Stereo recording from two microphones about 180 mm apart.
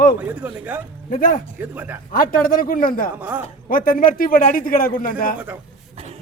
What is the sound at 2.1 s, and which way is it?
A man's voice, 50° left (ahead or behind).